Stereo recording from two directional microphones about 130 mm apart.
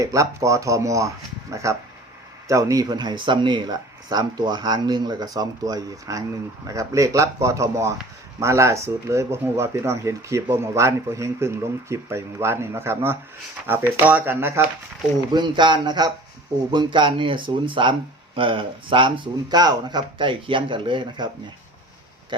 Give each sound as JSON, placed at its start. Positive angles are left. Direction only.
{"t": 0.0, "sound": "speech", "side_deg": -25}
{"t": 15.3, "sound": "speech", "side_deg": -35}
{"t": 22.3, "sound": "speech", "side_deg": -35}